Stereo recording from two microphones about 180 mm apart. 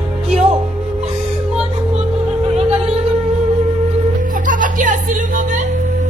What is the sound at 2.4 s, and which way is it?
Music, 35° right (ahead or behind).